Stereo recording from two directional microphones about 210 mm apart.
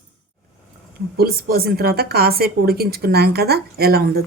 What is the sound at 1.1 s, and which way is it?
A woman's voice, 45° right (ahead or behind).